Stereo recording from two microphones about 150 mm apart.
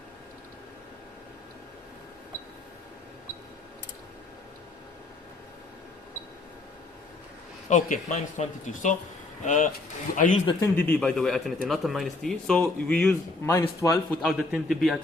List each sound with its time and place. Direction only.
7.7 s speech: 60° left (ahead or behind)
10.8 s speech: 10° left (ahead or behind)
13.5 s speech: 20° left (ahead or behind)
14.2 s speech: centre (ahead or behind)